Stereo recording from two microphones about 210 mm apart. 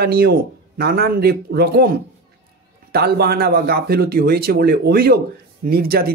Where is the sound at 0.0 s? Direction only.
50° right (ahead or behind).